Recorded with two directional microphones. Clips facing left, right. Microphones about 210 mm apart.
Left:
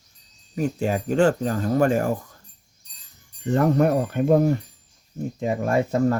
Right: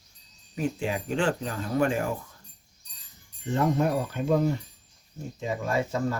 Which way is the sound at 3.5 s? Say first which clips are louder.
Left 6 dB; 60° left (ahead or behind).